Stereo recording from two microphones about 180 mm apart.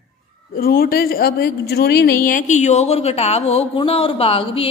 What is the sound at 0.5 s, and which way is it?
Speech, 55° left (ahead or behind).